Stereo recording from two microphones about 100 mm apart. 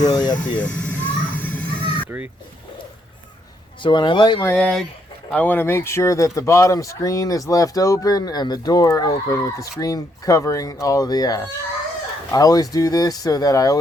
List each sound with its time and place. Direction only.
0.0 s speech: 45° left (ahead or behind)
0.6 s a sound: 15° left (ahead or behind)
2.0 s speech: 20° right (ahead or behind)
3.8 s speech: 50° left (ahead or behind)
5.3 s speech: 15° left (ahead or behind); by 13.7 s 35° left (ahead or behind)